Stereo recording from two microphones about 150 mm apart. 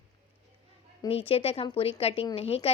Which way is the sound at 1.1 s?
40° left (ahead or behind).